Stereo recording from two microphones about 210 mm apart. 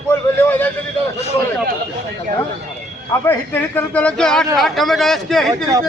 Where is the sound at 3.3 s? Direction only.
10° left (ahead or behind).